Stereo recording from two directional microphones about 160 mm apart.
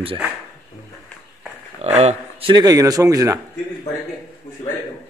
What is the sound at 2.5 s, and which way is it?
Speech, 25° right (ahead or behind).